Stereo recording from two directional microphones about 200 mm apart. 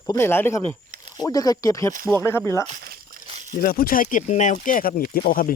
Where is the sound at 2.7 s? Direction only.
50° right (ahead or behind).